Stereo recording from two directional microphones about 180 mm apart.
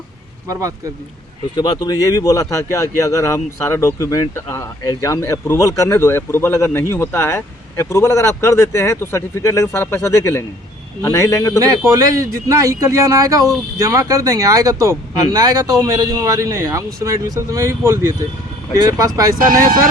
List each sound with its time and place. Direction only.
1.5 s speech: 20° left (ahead or behind)
11.9 s speech: 15° right (ahead or behind)